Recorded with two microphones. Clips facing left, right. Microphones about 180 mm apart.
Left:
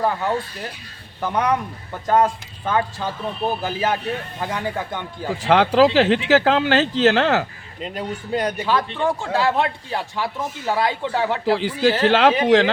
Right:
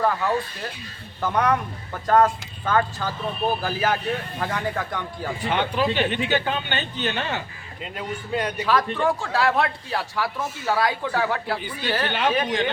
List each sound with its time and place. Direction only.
0.0 s speech: 25° left (ahead or behind)
5.4 s speech: 90° left
7.8 s speech: 35° left (ahead or behind)
9.0 s speech: 25° left (ahead or behind)
11.5 s speech: 90° left